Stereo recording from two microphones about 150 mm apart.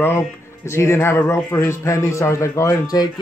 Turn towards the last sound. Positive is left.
turn(degrees=25)  # may be behind; listen again after turning